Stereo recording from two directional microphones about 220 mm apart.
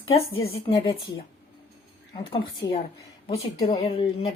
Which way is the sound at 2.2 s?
25° left (ahead or behind).